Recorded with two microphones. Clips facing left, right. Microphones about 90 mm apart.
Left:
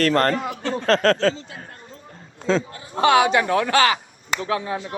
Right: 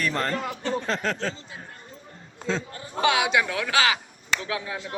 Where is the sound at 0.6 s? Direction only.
90° left.